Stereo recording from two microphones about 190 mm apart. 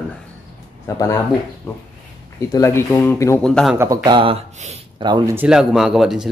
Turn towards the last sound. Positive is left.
turn(degrees=0)  # may be behind; listen again after turning